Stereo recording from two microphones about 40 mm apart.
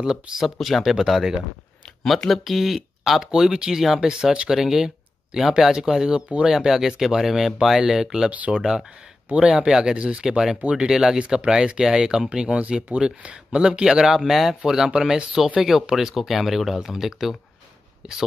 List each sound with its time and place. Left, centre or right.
0.0 s speech: centre
0.4 s speech: centre
3.3 s speech: centre
4.1 s speech: right
13.8 s speech: centre
14.9 s speech: right
15.3 s speech: centre